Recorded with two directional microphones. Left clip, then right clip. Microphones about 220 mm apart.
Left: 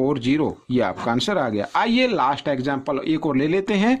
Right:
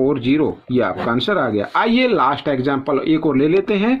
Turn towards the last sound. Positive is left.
turn(degrees=40)  # may be behind; listen again after turning